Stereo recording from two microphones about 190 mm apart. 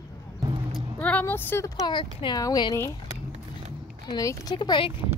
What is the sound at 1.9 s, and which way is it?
Speech, 25° left (ahead or behind).